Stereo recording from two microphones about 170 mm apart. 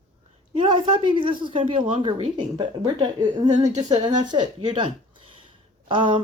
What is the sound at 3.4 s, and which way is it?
Speech, 45° right (ahead or behind).